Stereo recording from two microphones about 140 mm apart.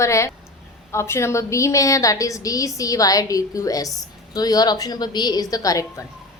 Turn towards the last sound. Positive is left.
turn(degrees=25)  # may be behind; listen again after turning